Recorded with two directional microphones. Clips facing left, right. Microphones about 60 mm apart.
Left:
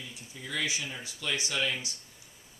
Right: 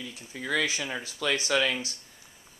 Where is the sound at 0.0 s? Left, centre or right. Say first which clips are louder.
Right 6 dB; right.